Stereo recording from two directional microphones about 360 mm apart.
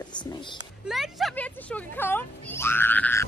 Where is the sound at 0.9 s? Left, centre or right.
Centre.